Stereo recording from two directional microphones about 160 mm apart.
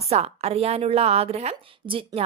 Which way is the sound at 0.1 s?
40° right (ahead or behind).